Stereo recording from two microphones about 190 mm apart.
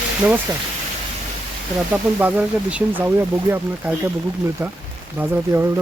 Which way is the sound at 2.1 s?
5° right (ahead or behind).